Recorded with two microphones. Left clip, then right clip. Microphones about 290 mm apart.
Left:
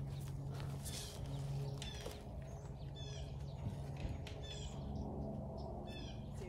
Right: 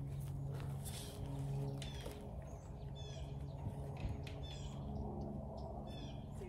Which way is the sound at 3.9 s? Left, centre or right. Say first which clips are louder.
Even; left.